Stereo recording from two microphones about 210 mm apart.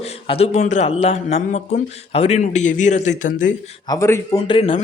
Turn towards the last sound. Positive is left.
turn(degrees=25)  # may be behind; listen again after turning